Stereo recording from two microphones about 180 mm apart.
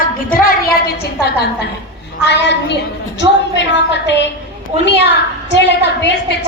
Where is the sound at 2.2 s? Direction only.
75° left (ahead or behind).